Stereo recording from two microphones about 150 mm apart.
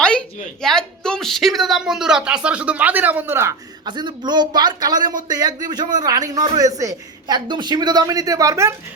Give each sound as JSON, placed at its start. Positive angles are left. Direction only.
{"t": 0.0, "sound": "a sound", "side_deg": 5}
{"t": 0.6, "sound": "speech", "side_deg": 5}
{"t": 3.8, "sound": "speech", "side_deg": -30}